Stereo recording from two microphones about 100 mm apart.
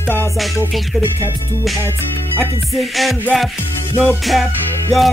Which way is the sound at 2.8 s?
Centre (ahead or behind).